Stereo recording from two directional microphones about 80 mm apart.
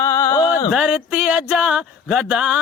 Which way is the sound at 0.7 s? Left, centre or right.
Centre.